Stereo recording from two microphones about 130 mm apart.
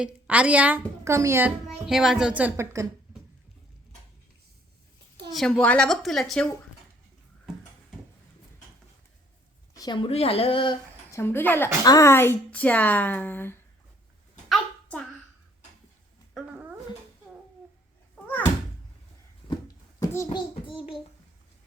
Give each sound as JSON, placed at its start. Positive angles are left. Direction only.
{"t": 0.0, "sound": "a woman's voice", "side_deg": -10}
{"t": 1.5, "sound": "speech", "side_deg": 0}
{"t": 5.3, "sound": "speech", "side_deg": 5}
{"t": 9.7, "sound": "a sound", "side_deg": 30}
{"t": 10.0, "sound": "speech", "side_deg": 50}
{"t": 11.1, "sound": "a woman's voice", "side_deg": 20}
{"t": 14.5, "sound": "a sound", "side_deg": 10}
{"t": 16.3, "sound": "dog", "side_deg": -10}
{"t": 19.5, "sound": "a sound", "side_deg": 25}
{"t": 20.7, "sound": "child singing", "side_deg": 40}